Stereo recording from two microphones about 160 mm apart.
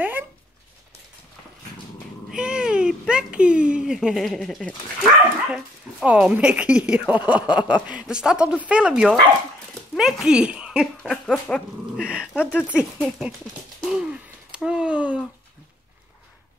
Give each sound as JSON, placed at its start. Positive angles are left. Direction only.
{"t": 2.3, "sound": "a child's voice", "side_deg": -5}
{"t": 6.0, "sound": "a woman's voice", "side_deg": -10}
{"t": 7.3, "sound": "speech", "side_deg": 30}
{"t": 7.7, "sound": "speech", "side_deg": -5}
{"t": 11.0, "sound": "a sound", "side_deg": 5}
{"t": 12.0, "sound": "a woman's voice", "side_deg": -5}
{"t": 13.8, "sound": "a sound", "side_deg": -5}